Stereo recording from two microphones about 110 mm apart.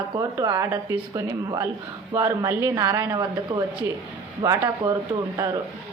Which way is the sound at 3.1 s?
40° right (ahead or behind).